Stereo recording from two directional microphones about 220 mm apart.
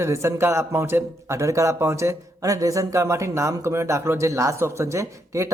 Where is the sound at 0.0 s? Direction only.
10° right (ahead or behind).